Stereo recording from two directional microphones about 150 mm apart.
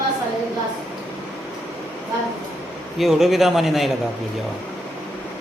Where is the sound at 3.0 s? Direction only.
Centre (ahead or behind).